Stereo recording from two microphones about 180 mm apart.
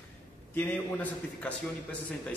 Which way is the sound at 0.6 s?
5° left (ahead or behind).